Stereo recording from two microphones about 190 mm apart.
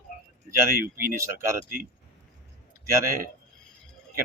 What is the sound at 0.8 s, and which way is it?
Speech, 50° right (ahead or behind).